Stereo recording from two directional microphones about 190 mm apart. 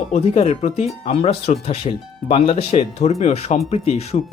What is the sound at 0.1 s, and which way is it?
Speech, 35° left (ahead or behind).